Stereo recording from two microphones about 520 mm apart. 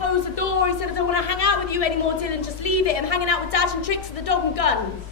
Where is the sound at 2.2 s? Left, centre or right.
Left.